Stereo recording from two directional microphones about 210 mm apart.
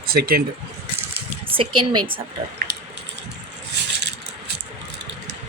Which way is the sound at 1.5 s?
25° right (ahead or behind).